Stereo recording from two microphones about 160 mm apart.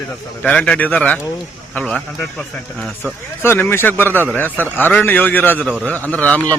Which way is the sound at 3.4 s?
15° left (ahead or behind).